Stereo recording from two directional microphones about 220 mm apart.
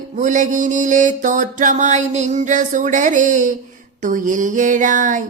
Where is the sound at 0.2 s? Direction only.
35° right (ahead or behind).